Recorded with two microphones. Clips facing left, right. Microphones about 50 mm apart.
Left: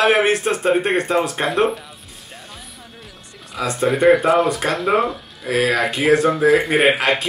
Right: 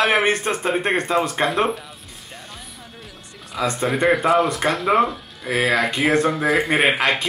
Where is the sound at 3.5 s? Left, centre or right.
Centre.